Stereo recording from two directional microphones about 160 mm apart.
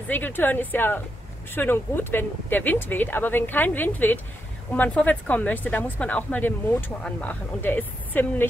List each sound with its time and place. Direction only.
0.1 s speech: 10° left (ahead or behind)